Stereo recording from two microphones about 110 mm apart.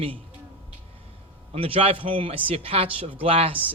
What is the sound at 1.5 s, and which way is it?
A man's voice, 60° right (ahead or behind).